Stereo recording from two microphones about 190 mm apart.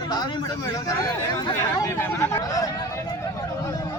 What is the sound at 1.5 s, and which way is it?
Speech, 15° left (ahead or behind).